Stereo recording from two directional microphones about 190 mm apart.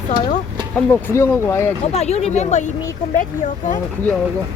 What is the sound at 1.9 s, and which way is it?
Speech, 35° left (ahead or behind).